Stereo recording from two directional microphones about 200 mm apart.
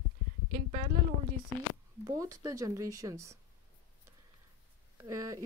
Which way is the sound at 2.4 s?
15° right (ahead or behind).